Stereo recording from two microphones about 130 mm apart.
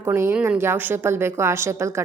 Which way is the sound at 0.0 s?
20° right (ahead or behind).